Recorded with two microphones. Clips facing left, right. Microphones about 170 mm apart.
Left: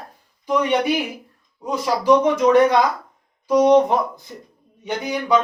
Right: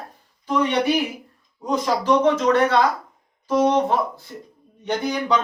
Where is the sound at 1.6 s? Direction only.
10° left (ahead or behind).